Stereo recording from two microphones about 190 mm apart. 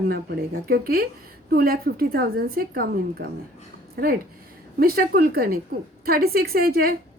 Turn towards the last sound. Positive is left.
turn(degrees=-50)  # may be behind; listen again after turning